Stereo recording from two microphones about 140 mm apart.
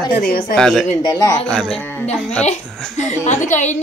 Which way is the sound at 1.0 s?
25° left (ahead or behind).